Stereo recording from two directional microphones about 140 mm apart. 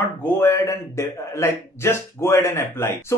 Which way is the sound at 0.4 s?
20° left (ahead or behind).